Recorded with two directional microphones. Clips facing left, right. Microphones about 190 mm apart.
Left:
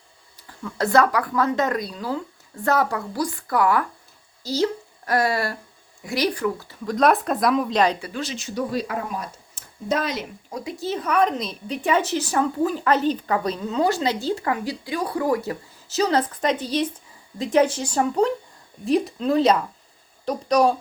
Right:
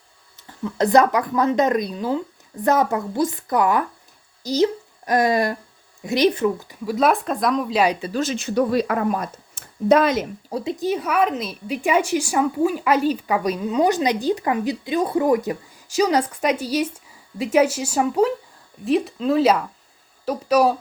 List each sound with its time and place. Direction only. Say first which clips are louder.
0.3 s speech: right 5 dB; 20° right (ahead or behind)
6.8 s speech: even; 5° right (ahead or behind)
8.1 s speech: right 7 dB; 50° right (ahead or behind)
10.5 s speech: right 6 dB; 25° right (ahead or behind)
10.8 s a woman's voice: even; 10° right (ahead or behind)